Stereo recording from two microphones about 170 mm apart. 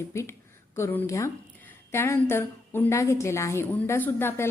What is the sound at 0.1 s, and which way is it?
A woman's voice, 15° left (ahead or behind).